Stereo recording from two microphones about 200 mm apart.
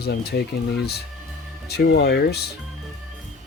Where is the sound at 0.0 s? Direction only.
55° left (ahead or behind).